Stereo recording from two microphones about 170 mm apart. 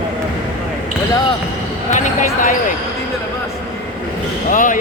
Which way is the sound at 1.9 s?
50° left (ahead or behind).